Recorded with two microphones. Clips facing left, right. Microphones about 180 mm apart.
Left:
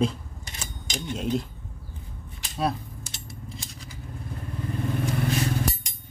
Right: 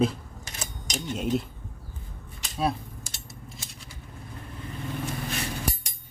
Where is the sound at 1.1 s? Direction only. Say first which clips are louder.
Even; centre (ahead or behind).